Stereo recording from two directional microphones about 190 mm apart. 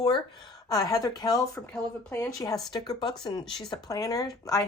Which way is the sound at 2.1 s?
15° left (ahead or behind).